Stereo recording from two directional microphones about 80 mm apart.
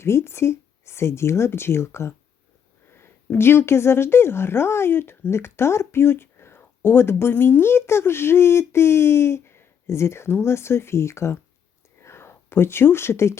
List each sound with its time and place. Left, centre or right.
0.0 s speech: left